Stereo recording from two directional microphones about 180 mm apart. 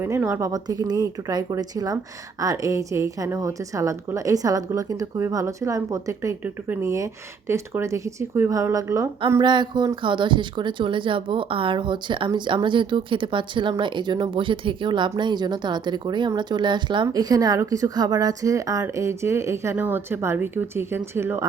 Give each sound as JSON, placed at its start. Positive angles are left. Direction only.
{"t": 0.0, "sound": "a woman's voice", "side_deg": -15}